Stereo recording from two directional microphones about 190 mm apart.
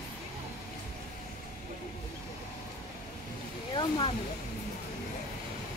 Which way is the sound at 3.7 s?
25° left (ahead or behind).